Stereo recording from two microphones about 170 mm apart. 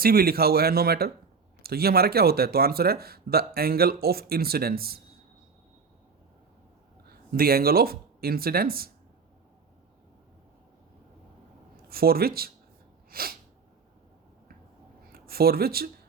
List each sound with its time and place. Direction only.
0.0 s speech: 60° right (ahead or behind)
7.1 s speech: 60° right (ahead or behind)
11.9 s speech: 60° right (ahead or behind)
13.1 s sneeze: 60° right (ahead or behind)
15.1 s speech: 65° right (ahead or behind)